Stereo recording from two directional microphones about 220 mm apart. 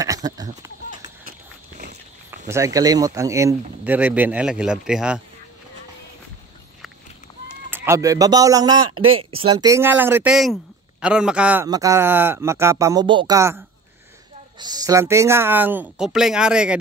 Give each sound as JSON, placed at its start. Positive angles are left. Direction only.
{"t": 0.0, "sound": "a sound", "side_deg": -15}
{"t": 2.4, "sound": "speech", "side_deg": -15}
{"t": 7.7, "sound": "a man's voice", "side_deg": -10}
{"t": 8.9, "sound": "speech", "side_deg": -70}
{"t": 9.3, "sound": "speech", "side_deg": -20}